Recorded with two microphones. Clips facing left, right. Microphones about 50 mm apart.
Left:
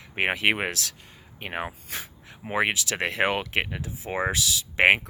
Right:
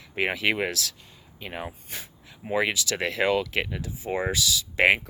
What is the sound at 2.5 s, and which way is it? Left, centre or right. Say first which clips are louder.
Speech: even; left.